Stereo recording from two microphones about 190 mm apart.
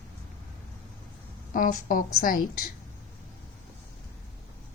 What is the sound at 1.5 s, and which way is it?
Speech, 45° left (ahead or behind).